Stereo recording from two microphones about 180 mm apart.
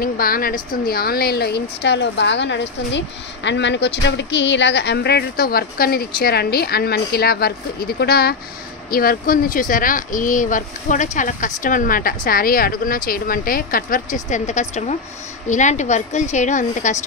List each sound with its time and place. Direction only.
0.0 s a woman's voice: 55° left (ahead or behind)